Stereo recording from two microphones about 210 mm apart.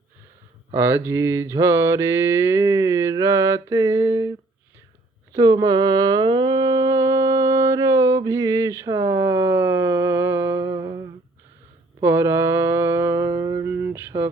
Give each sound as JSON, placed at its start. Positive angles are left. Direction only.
{"t": 0.7, "sound": "mantra", "side_deg": -10}
{"t": 5.3, "sound": "humming", "side_deg": -15}
{"t": 12.0, "sound": "music", "side_deg": -10}